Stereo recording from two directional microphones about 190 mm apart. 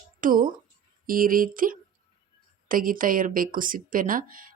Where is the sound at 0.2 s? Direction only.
45° right (ahead or behind).